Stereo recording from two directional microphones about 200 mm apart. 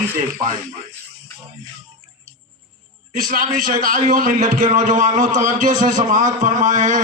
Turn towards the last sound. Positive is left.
turn(degrees=-40)  # may be behind; listen again after turning